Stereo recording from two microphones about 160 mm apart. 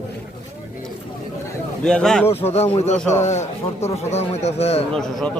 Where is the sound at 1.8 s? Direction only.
5° left (ahead or behind).